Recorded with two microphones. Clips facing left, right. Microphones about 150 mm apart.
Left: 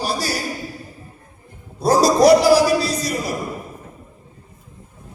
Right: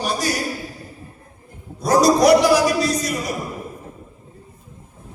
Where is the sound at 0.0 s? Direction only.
30° left (ahead or behind).